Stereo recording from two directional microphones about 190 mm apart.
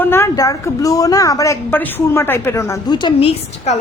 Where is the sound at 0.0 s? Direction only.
10° left (ahead or behind).